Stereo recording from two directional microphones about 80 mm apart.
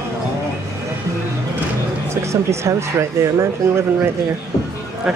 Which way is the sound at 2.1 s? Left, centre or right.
Right.